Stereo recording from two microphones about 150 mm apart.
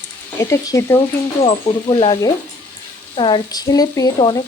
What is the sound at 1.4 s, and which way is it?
Speech, 30° left (ahead or behind).